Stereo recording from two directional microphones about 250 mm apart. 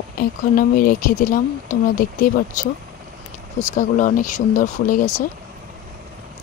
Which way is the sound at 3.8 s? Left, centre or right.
Left.